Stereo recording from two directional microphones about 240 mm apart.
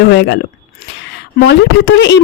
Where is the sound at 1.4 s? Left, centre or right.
Left.